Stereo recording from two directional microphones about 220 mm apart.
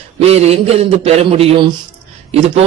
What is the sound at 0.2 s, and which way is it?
A man's voice, 30° right (ahead or behind).